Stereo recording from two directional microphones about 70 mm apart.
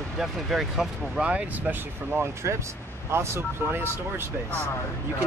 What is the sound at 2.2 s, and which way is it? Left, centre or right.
Speech, right.